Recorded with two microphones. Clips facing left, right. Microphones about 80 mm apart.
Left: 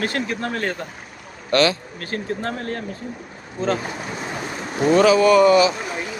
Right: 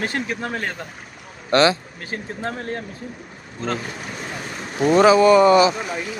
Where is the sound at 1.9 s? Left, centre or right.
Centre.